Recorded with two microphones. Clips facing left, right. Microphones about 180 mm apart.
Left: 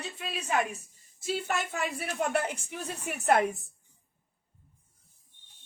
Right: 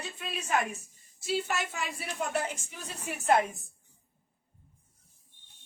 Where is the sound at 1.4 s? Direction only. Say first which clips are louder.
Left 2 dB; 55° left (ahead or behind).